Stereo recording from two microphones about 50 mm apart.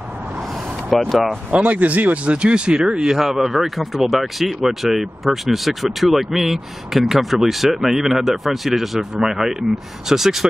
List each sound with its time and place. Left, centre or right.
0.9 s speech: centre
1.5 s speech: right
2.3 s speech: centre